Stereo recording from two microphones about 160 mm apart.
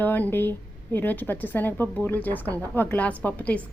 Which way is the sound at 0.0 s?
10° left (ahead or behind).